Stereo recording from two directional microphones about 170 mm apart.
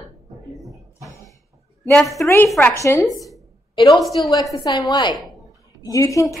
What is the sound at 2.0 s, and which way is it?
Speech, centre (ahead or behind).